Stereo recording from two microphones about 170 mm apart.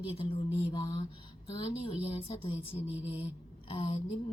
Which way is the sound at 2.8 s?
10° right (ahead or behind).